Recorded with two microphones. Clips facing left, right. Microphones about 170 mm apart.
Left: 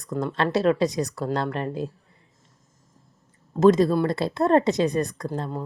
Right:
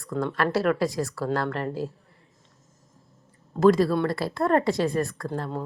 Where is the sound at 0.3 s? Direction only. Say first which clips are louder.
Left 3 dB; 20° left (ahead or behind).